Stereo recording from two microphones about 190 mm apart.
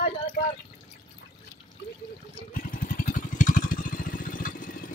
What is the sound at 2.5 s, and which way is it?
Vehicle, 45° left (ahead or behind).